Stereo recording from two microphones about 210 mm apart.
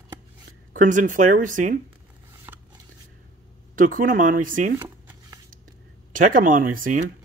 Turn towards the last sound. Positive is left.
turn(degrees=-40)  # may be behind; listen again after turning